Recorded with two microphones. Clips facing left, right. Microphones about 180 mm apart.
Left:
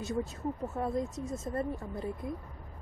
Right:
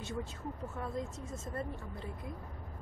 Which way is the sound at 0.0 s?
40° left (ahead or behind).